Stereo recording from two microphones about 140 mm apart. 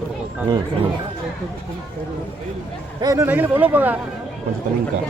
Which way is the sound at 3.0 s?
25° right (ahead or behind).